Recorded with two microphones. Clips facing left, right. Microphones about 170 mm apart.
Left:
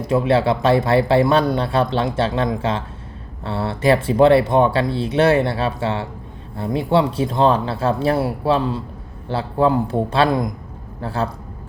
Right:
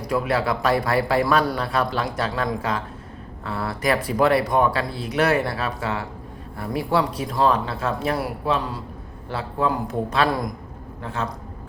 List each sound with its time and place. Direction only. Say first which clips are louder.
0.0 s speech: left 6 dB; 25° left (ahead or behind)
11.0 s a man's voice: left 5 dB; 35° left (ahead or behind)